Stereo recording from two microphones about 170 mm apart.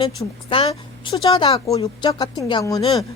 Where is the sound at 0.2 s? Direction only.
25° left (ahead or behind).